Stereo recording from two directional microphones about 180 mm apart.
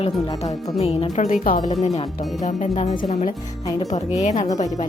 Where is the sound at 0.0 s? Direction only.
20° left (ahead or behind).